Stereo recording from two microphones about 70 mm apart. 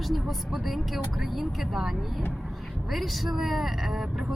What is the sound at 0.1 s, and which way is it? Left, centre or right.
Speech, centre.